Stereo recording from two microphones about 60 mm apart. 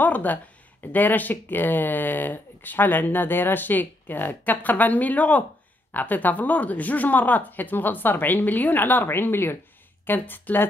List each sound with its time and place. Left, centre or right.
0.0 s speech: left